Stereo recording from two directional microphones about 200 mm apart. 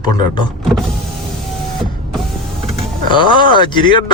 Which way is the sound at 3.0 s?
25° left (ahead or behind).